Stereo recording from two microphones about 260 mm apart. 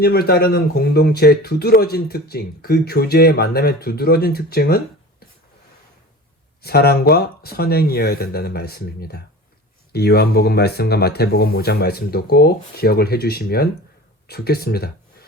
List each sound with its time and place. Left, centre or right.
0.0 s speech: left
6.6 s speech: left